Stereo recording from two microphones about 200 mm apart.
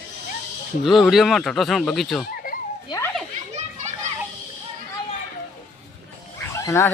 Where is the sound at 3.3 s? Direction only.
35° right (ahead or behind).